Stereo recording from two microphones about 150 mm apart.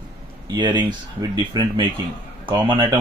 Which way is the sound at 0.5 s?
30° right (ahead or behind).